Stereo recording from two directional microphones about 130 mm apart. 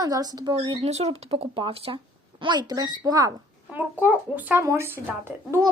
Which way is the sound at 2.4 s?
35° right (ahead or behind).